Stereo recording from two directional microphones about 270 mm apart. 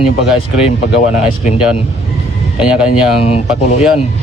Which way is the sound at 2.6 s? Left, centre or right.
Centre.